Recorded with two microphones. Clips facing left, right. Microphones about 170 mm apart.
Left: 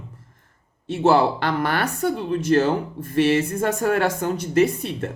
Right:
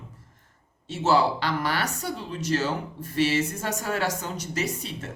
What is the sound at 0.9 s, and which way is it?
Speech, 55° left (ahead or behind).